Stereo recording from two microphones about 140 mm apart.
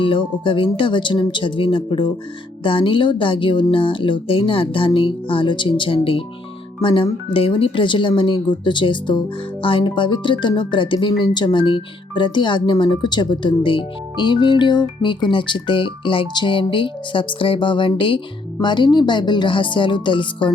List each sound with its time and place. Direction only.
0.0 s speech: 35° left (ahead or behind)